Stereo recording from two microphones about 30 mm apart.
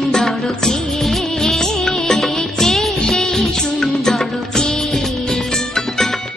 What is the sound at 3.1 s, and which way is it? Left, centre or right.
Music, centre.